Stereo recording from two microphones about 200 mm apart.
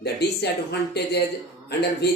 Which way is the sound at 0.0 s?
55° left (ahead or behind).